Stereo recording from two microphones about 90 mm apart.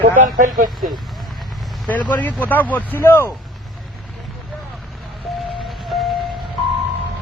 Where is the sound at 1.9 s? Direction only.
20° left (ahead or behind).